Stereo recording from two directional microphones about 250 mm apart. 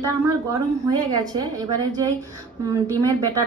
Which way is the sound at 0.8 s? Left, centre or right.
Centre.